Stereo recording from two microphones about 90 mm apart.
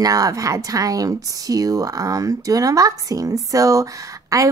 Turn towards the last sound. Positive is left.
turn(degrees=-40)  # may be behind; listen again after turning